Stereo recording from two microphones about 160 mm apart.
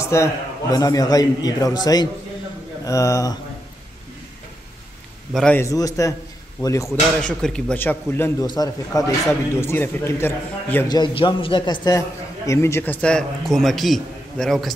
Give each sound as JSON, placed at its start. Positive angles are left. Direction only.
{"t": 0.0, "sound": "a man's voice", "side_deg": 20}
{"t": 5.3, "sound": "a man's voice", "side_deg": 5}
{"t": 5.6, "sound": "a man's voice", "side_deg": 20}
{"t": 6.9, "sound": "a man's voice", "side_deg": 5}
{"t": 10.9, "sound": "a man's voice", "side_deg": 30}